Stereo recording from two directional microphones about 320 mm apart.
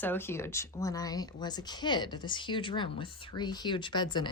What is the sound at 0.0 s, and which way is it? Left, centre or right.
Speech, centre.